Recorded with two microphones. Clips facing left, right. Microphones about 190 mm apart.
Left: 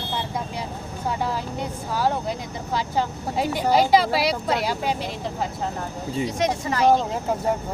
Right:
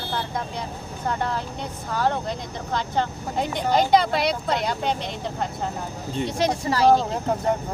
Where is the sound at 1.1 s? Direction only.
10° left (ahead or behind).